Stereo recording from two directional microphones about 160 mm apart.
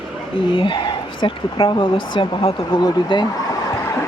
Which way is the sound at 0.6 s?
30° left (ahead or behind).